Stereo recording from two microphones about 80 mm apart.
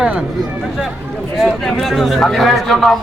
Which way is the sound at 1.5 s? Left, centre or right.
Centre.